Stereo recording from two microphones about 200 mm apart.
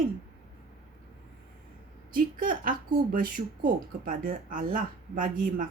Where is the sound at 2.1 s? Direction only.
45° right (ahead or behind).